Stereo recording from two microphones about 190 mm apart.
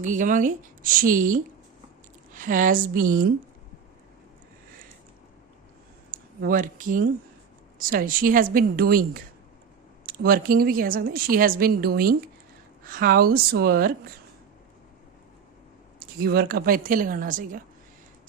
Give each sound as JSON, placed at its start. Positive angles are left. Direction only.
{"t": 0.0, "sound": "a woman's voice", "side_deg": -40}
{"t": 6.1, "sound": "a woman's voice", "side_deg": -45}
{"t": 16.0, "sound": "a woman's voice", "side_deg": -55}